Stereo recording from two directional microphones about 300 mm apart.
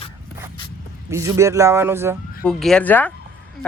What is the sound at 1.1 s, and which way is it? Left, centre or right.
Speech, centre.